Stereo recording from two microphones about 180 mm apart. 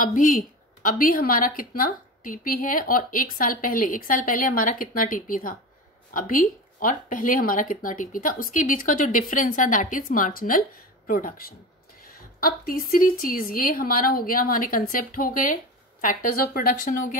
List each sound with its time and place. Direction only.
0.0 s a woman's voice: 45° left (ahead or behind)